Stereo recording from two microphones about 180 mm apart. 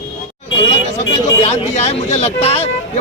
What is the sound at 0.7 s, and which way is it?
Speech, 35° left (ahead or behind).